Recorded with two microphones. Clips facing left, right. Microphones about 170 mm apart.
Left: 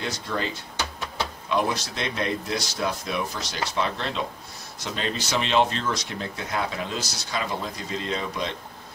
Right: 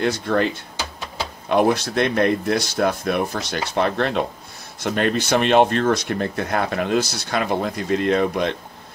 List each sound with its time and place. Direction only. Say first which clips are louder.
0.0 s speech: right 10 dB; 60° right (ahead or behind)
1.5 s speech: right 9 dB; 55° right (ahead or behind)